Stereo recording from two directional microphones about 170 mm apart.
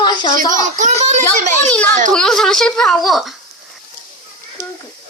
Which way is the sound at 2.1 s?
5° left (ahead or behind).